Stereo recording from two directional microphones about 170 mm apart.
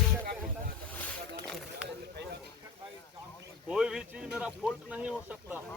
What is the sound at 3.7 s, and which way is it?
Speech, 5° right (ahead or behind).